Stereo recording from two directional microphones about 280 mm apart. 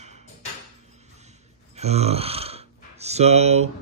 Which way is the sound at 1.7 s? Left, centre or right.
Right.